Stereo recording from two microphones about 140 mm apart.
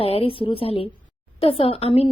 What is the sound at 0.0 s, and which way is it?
A woman's voice, 40° left (ahead or behind).